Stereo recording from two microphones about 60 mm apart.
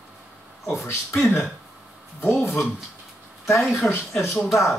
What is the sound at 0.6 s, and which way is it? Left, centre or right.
Speech, left.